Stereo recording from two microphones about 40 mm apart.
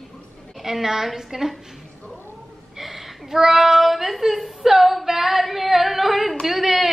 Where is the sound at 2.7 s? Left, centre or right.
Centre.